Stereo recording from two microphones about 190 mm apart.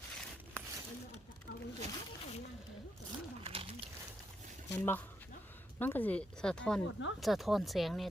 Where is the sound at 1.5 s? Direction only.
65° left (ahead or behind).